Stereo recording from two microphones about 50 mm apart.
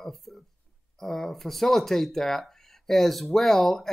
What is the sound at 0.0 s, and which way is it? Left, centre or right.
Speech, centre.